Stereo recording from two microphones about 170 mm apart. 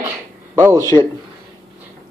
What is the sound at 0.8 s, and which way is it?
Speech, 20° left (ahead or behind).